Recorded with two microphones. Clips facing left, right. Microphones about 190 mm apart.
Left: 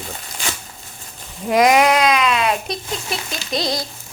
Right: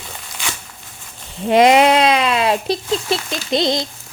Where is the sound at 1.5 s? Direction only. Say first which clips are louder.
Right 3 dB; 25° right (ahead or behind).